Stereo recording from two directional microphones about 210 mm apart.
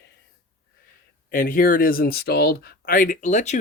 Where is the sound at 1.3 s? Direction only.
40° left (ahead or behind).